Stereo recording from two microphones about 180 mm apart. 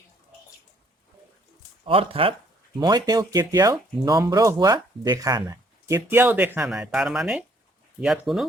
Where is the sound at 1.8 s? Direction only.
30° right (ahead or behind).